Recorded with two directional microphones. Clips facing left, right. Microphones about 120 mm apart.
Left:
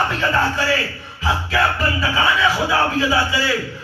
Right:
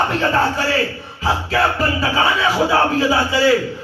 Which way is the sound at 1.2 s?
35° right (ahead or behind).